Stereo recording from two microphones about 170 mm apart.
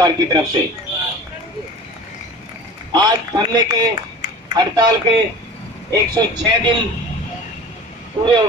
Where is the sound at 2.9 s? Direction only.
25° right (ahead or behind).